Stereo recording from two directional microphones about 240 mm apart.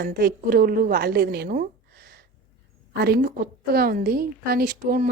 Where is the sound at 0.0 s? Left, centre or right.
Right.